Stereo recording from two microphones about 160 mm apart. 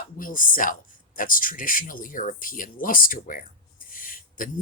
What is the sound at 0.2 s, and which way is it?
Speech, 60° left (ahead or behind).